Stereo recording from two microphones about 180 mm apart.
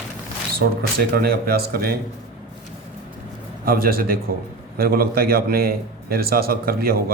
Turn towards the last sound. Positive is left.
turn(degrees=-55)  # may be behind; listen again after turning